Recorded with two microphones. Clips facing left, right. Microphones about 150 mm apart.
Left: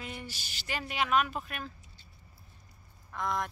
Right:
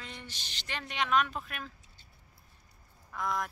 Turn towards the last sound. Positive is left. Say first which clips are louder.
# left 1 dB
turn(degrees=0)  # may be behind; listen again after turning